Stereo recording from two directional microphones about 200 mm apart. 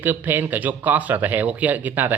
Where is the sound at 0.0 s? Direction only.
10° right (ahead or behind).